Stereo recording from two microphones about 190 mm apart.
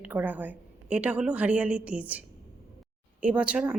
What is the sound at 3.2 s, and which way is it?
Speech, 5° right (ahead or behind).